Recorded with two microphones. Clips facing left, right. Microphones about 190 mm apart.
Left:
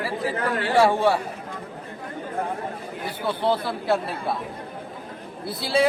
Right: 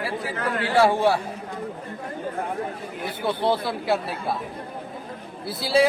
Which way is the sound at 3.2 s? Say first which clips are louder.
Even; 15° right (ahead or behind).